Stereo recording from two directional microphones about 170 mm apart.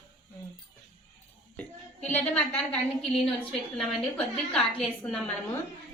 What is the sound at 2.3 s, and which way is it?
Speech, 5° left (ahead or behind).